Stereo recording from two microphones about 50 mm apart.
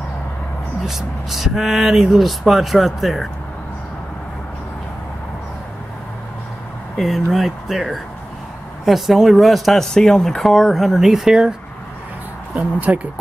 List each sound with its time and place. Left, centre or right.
0.8 s speech: centre
7.3 s speech: centre
12.5 s speech: right